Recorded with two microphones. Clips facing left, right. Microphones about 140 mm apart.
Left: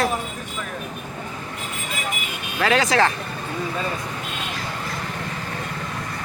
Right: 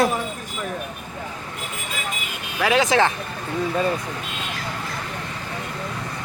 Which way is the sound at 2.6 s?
15° right (ahead or behind).